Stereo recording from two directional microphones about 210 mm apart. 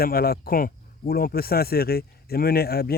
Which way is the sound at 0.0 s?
45° left (ahead or behind).